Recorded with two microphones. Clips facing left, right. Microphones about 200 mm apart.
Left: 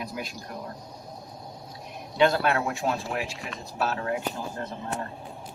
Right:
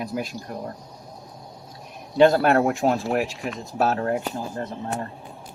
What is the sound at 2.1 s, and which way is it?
Speech, 40° right (ahead or behind).